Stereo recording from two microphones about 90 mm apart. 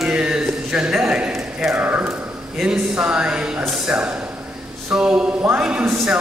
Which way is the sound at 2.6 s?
10° right (ahead or behind).